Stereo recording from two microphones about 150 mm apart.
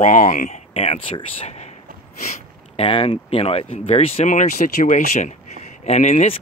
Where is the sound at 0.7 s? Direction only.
40° left (ahead or behind).